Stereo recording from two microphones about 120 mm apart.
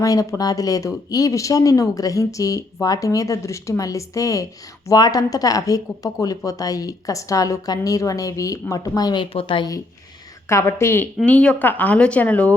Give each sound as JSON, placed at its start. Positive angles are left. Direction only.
{"t": 0.0, "sound": "speech", "side_deg": 30}
{"t": 9.3, "sound": "a woman's voice", "side_deg": 45}
{"t": 10.5, "sound": "speech", "side_deg": 25}